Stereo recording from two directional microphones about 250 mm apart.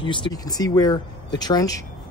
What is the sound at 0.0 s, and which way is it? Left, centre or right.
Speech, centre.